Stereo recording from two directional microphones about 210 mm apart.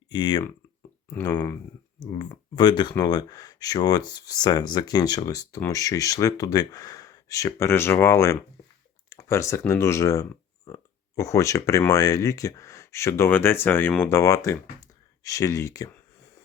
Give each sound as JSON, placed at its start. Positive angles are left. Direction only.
{"t": 0.1, "sound": "a sound", "side_deg": 20}
{"t": 1.3, "sound": "speech", "side_deg": 10}
{"t": 2.1, "sound": "speech", "side_deg": 20}